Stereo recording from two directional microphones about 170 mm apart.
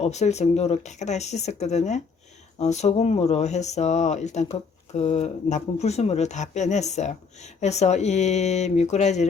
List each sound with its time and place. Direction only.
0.0 s speech: 40° left (ahead or behind)